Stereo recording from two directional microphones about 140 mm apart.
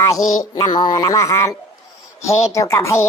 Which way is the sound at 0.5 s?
30° left (ahead or behind).